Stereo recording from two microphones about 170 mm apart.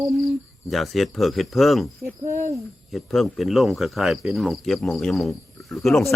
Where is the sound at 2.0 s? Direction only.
15° right (ahead or behind).